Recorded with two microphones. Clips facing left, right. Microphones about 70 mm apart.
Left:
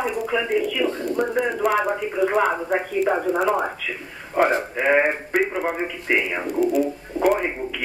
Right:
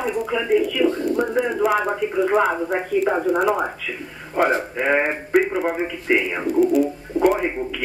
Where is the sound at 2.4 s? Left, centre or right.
Centre.